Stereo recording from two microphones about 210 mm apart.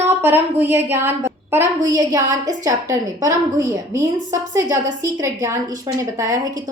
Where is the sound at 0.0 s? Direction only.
10° right (ahead or behind).